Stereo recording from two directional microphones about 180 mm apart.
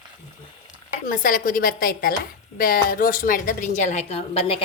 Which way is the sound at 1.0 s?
50° left (ahead or behind).